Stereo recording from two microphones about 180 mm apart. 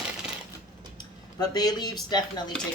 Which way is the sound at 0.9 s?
20° left (ahead or behind).